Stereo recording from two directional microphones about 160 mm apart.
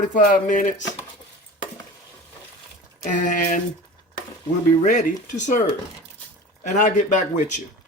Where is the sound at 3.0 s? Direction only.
50° left (ahead or behind).